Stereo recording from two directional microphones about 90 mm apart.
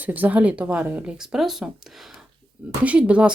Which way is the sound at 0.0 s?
20° right (ahead or behind).